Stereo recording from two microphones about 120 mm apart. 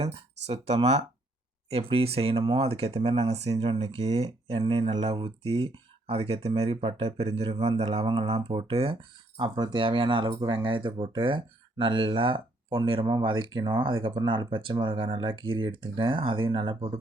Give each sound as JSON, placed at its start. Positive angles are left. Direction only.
{"t": 0.0, "sound": "speech", "side_deg": -55}